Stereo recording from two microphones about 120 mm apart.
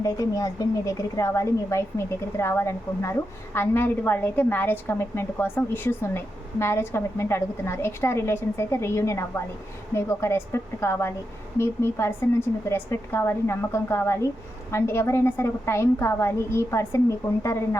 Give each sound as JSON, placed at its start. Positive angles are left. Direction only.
{"t": 0.0, "sound": "a woman's voice", "side_deg": 30}